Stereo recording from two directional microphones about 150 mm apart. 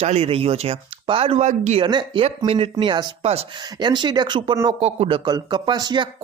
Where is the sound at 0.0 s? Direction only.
45° right (ahead or behind).